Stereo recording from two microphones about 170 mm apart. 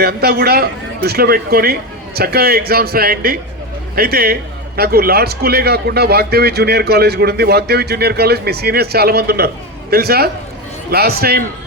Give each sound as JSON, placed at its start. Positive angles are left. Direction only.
{"t": 0.0, "sound": "a man's voice", "side_deg": -65}